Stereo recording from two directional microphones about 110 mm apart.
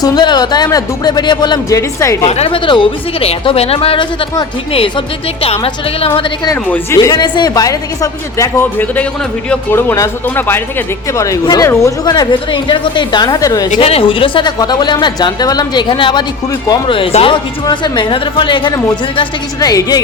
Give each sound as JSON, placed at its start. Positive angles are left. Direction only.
{"t": 0.0, "sound": "speech", "side_deg": 40}
{"t": 2.2, "sound": "a woman's voice", "side_deg": 60}
{"t": 2.6, "sound": "a woman's voice", "side_deg": 50}
{"t": 6.1, "sound": "a woman's voice", "side_deg": 50}
{"t": 6.9, "sound": "speech", "side_deg": 30}
{"t": 8.5, "sound": "speech", "side_deg": 20}
{"t": 12.0, "sound": "a woman's voice", "side_deg": 40}
{"t": 13.7, "sound": "a woman's voice", "side_deg": 60}
{"t": 14.6, "sound": "speech", "side_deg": 40}
{"t": 16.5, "sound": "speech", "side_deg": 35}
{"t": 16.9, "sound": "a woman's voice", "side_deg": 60}
{"t": 17.3, "sound": "a woman's voice", "side_deg": 40}
{"t": 19.5, "sound": "speech", "side_deg": 35}